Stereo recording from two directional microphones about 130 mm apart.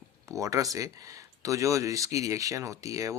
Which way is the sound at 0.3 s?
25° right (ahead or behind).